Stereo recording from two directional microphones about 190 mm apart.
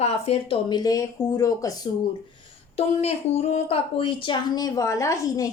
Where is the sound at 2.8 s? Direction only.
35° left (ahead or behind).